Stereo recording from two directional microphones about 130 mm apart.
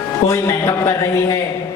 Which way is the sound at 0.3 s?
25° left (ahead or behind).